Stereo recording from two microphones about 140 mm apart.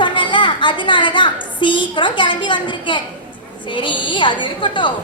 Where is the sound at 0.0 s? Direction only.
35° left (ahead or behind).